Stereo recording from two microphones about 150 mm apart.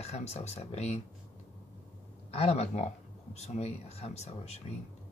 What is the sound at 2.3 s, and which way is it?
Speech, 45° left (ahead or behind).